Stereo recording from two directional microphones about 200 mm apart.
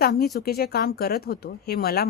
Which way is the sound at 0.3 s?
50° left (ahead or behind).